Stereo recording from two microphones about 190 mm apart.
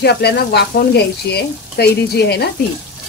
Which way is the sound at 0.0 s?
60° left (ahead or behind).